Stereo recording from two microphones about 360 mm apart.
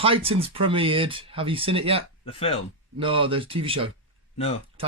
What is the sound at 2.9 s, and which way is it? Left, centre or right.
Speech, centre.